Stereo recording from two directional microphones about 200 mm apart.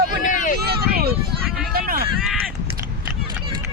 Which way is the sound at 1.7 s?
50° right (ahead or behind).